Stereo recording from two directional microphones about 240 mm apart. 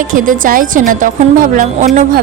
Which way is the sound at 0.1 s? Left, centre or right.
Right.